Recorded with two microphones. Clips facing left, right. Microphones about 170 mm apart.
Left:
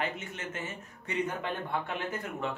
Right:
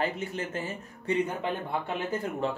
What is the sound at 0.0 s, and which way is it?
A man's voice, 35° right (ahead or behind).